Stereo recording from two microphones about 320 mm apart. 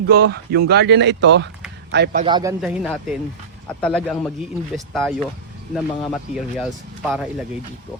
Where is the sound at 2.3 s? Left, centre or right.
Centre.